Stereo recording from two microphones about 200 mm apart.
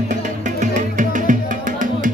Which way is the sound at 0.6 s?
40° right (ahead or behind).